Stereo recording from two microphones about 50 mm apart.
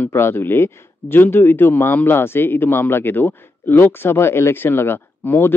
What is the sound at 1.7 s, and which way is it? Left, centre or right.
Speech, left.